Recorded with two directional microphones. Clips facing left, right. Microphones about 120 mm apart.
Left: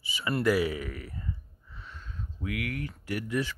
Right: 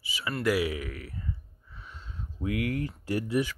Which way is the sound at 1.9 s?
20° right (ahead or behind).